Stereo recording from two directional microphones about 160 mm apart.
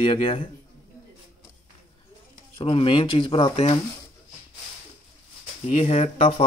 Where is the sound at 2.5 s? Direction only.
35° left (ahead or behind).